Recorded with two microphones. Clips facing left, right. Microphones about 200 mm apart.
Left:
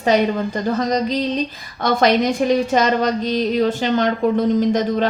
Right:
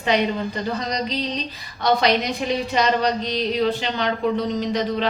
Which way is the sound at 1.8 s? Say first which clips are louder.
Left 4 dB; 50° left (ahead or behind).